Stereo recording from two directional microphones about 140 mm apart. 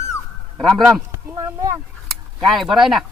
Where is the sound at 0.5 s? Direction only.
5° left (ahead or behind).